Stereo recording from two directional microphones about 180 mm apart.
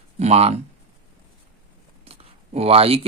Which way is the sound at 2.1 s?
35° right (ahead or behind).